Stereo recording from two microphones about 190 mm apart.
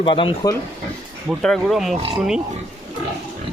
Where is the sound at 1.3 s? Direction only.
Centre (ahead or behind).